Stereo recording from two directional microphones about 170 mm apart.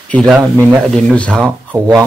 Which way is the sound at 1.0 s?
5° left (ahead or behind).